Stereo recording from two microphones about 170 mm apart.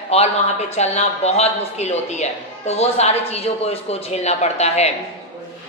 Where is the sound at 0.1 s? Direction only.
35° left (ahead or behind).